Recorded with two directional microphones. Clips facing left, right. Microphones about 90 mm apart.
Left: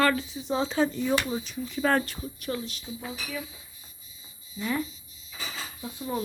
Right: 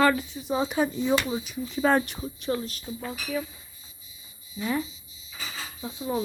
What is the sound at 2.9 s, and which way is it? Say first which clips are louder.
Speech: right 2 dB; 45° right (ahead or behind).